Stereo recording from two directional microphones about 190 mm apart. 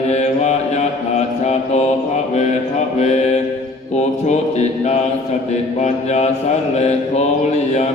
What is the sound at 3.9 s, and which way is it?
Mantra, 35° left (ahead or behind).